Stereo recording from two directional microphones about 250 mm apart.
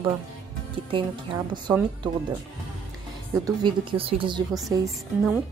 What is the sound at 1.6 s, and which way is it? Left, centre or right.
Speech, centre.